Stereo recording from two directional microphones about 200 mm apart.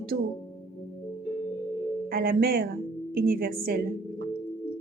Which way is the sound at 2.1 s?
50° right (ahead or behind).